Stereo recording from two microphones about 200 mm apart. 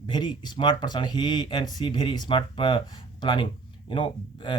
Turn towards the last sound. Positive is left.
turn(degrees=25)  # may be behind; listen again after turning